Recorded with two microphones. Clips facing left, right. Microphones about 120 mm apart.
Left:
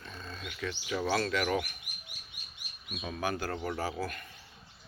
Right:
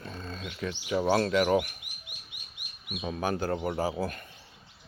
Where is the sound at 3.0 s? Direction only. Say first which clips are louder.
Right 4 dB; 30° right (ahead or behind).